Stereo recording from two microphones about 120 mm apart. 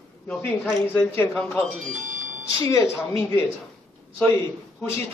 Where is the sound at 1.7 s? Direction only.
90° right.